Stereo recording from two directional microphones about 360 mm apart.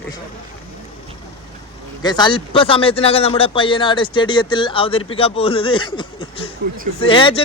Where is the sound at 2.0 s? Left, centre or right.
Centre.